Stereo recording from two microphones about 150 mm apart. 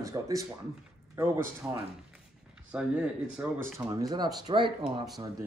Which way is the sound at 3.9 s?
25° right (ahead or behind).